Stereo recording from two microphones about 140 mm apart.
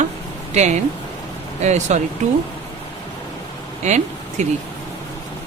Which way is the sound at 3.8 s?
55° right (ahead or behind).